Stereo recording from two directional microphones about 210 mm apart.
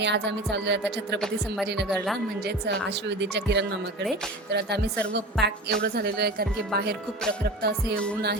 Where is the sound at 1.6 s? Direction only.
55° right (ahead or behind).